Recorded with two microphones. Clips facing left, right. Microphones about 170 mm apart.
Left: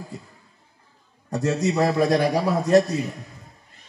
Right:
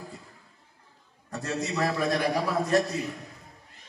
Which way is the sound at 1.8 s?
40° left (ahead or behind).